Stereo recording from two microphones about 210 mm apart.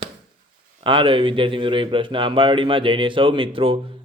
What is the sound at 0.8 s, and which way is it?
Speech, 25° right (ahead or behind).